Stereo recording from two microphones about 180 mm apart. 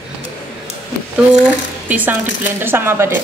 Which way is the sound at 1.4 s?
10° right (ahead or behind).